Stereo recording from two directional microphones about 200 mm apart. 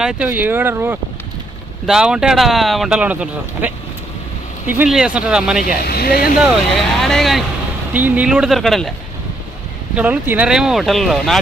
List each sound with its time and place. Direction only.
0.0 s speech: 5° right (ahead or behind)
5.6 s speech: 50° left (ahead or behind)
7.0 s speech: centre (ahead or behind)
9.9 s speech: 5° right (ahead or behind)